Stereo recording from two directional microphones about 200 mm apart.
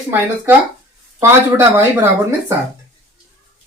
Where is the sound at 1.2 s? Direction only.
15° right (ahead or behind).